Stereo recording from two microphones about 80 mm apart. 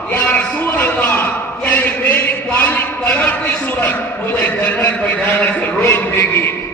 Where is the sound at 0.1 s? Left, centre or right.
Left.